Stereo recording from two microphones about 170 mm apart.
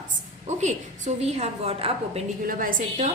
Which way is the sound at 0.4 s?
45° right (ahead or behind).